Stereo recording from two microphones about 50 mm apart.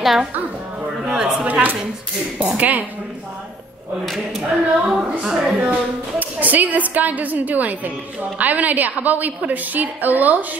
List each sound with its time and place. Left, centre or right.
0.0 s a woman's voice: centre
1.1 s speech: centre
1.5 s a woman's voice: right
4.0 s speech: centre
4.4 s speech: centre
5.3 s speech: centre
5.6 s a woman's voice: right